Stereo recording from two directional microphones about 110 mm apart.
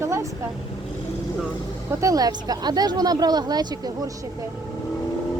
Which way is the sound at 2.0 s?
30° right (ahead or behind).